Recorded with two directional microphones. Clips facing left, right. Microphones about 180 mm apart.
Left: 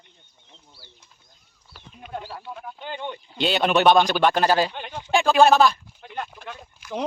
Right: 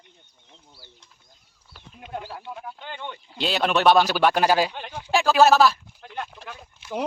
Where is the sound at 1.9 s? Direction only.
Centre (ahead or behind).